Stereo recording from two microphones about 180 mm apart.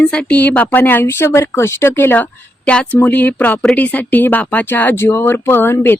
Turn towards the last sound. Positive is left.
turn(degrees=10)  # may be behind; listen again after turning